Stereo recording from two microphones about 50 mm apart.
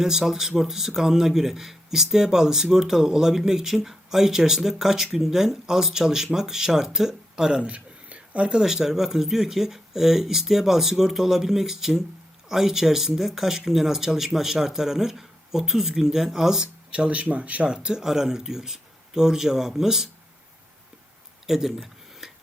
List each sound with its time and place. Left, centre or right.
0.0 s speech: centre
7.6 s a sound: right
8.6 s speech: centre
16.9 s speech: right
17.7 s speech: centre
21.4 s speech: centre
22.2 s tick-tock: centre